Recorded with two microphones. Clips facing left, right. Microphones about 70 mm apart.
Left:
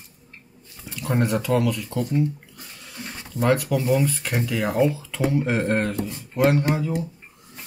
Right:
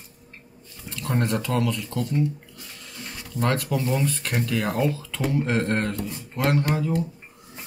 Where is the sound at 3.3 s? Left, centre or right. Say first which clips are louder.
Left 4 dB; centre.